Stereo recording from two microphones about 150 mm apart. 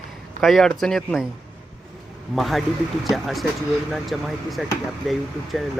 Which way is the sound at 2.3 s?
Centre (ahead or behind).